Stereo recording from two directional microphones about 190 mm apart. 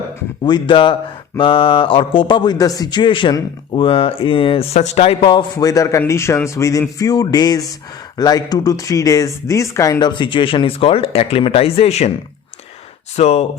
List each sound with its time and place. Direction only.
0.4 s a man's voice: 25° left (ahead or behind)
13.1 s speech: 35° left (ahead or behind)